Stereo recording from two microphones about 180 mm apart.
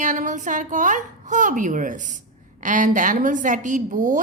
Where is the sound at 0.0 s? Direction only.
45° right (ahead or behind).